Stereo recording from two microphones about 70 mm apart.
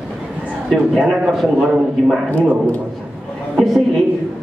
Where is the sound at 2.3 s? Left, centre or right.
Left.